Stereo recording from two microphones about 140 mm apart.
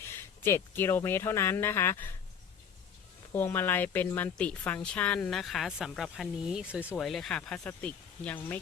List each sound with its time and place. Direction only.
0.0 s speech: 15° left (ahead or behind)
3.3 s a woman's voice: 15° left (ahead or behind); by 6.9 s 10° right (ahead or behind)
6.9 s a woman's voice: centre (ahead or behind)